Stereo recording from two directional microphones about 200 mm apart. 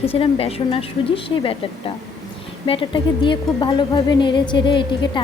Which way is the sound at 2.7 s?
25° left (ahead or behind).